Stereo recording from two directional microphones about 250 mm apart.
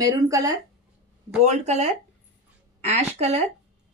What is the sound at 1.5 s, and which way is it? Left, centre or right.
A woman's voice, right.